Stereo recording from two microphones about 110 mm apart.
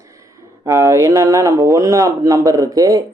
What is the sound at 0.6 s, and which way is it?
Speech, 25° right (ahead or behind).